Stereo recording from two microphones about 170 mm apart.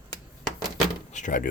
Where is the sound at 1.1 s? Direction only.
45° left (ahead or behind).